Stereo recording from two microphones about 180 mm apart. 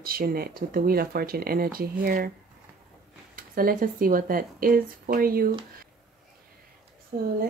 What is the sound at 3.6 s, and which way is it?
Speech, 50° right (ahead or behind).